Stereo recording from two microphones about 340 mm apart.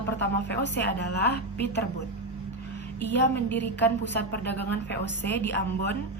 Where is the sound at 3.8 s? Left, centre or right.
Left.